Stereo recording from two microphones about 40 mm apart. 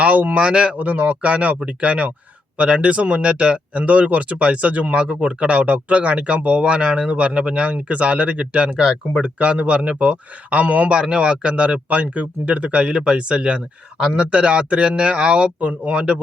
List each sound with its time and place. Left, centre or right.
0.0 s speech: right
0.3 s speech: right
0.8 s speech: right
8.8 s speech: centre
9.2 s speech: right
10.9 s speech: right